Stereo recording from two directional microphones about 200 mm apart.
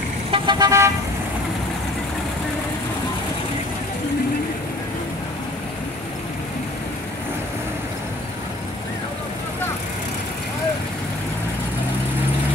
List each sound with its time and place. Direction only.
0.3 s vehicle: 20° right (ahead or behind)